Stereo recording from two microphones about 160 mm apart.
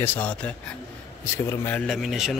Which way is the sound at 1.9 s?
Centre (ahead or behind).